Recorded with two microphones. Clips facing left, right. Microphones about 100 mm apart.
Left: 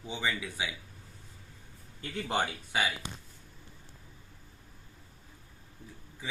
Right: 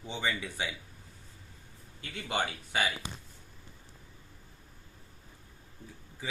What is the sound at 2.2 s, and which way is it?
Speech, 30° left (ahead or behind).